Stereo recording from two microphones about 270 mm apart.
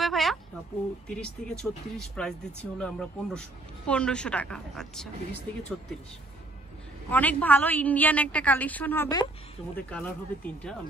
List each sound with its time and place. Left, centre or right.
0.0 s a sound: centre
1.0 s speech: centre
7.1 s speech: centre